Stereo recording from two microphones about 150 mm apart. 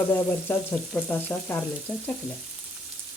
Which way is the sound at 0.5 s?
15° left (ahead or behind).